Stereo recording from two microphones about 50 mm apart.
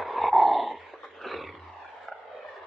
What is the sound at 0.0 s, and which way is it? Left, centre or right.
Dog, centre.